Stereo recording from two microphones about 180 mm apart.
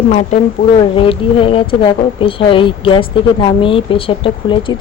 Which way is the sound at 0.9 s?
30° left (ahead or behind).